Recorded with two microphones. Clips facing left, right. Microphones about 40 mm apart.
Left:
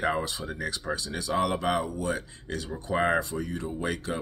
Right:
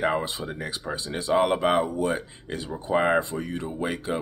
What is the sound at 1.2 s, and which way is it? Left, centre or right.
Speech, right.